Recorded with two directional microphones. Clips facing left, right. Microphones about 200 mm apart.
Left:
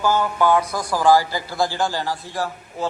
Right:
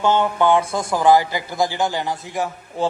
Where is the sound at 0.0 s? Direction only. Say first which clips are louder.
Right 2 dB; 25° right (ahead or behind).